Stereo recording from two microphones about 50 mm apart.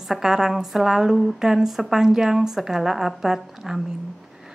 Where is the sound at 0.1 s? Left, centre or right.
Centre.